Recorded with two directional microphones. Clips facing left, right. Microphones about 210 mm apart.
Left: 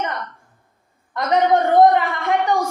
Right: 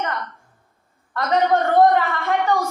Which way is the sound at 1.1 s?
15° left (ahead or behind).